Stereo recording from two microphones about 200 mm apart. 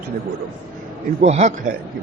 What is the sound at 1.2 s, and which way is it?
Speech, 35° right (ahead or behind).